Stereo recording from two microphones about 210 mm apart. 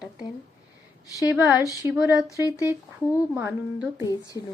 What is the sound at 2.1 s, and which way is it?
Speech, 15° left (ahead or behind).